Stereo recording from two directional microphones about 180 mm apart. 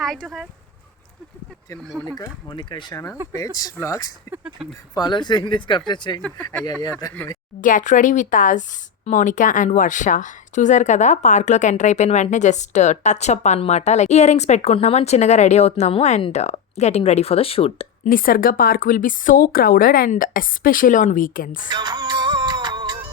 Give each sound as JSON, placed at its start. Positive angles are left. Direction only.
{"t": 0.0, "sound": "speech", "side_deg": 0}
{"t": 2.1, "sound": "speech", "side_deg": 25}
{"t": 4.3, "sound": "speech", "side_deg": -5}
{"t": 4.9, "sound": "speech", "side_deg": 25}
{"t": 7.6, "sound": "speech", "side_deg": 45}
{"t": 18.1, "sound": "speech", "side_deg": 50}
{"t": 21.7, "sound": "music", "side_deg": -25}